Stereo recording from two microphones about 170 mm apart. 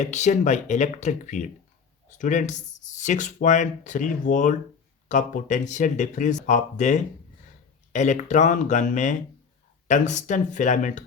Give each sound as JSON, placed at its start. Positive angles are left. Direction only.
{"t": 0.0, "sound": "speech", "side_deg": 45}